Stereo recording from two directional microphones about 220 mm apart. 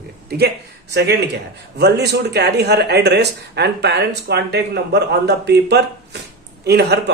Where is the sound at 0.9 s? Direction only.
50° right (ahead or behind).